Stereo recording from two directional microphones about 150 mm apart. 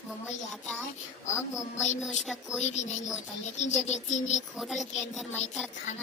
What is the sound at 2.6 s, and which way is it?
Speech, 50° left (ahead or behind).